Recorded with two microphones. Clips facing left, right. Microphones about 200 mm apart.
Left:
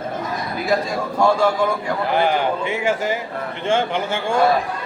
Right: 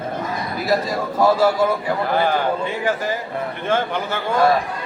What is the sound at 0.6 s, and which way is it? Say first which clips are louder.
A man's voice: right 1 dB; centre (ahead or behind).